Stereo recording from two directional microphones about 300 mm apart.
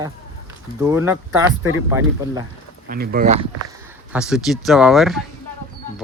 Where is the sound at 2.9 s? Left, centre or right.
Right.